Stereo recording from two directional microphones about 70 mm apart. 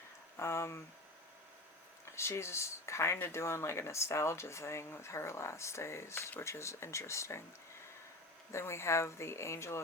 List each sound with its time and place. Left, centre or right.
0.3 s speech: left
2.1 s speech: left
8.5 s speech: left